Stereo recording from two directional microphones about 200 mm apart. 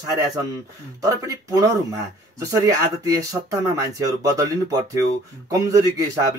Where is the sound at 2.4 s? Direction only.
15° right (ahead or behind).